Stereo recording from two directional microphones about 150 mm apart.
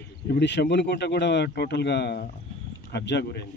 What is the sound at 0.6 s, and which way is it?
Speech, 90° left.